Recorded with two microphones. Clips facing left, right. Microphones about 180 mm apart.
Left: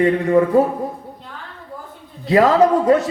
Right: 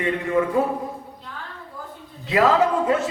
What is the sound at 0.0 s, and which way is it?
Speech, 40° left (ahead or behind).